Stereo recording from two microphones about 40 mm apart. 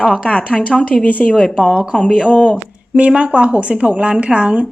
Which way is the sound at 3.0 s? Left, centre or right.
Right.